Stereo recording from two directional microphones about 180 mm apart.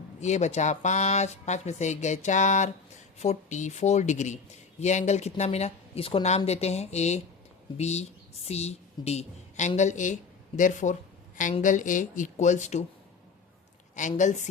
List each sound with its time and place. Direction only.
0.2 s a woman's voice: 40° left (ahead or behind)
13.9 s speech: 45° left (ahead or behind)